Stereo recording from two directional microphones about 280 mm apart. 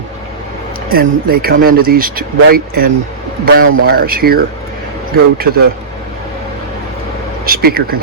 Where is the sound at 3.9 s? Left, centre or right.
Right.